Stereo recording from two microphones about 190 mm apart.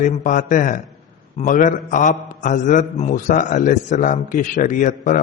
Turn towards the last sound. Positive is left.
turn(degrees=45)  # may be behind; listen again after turning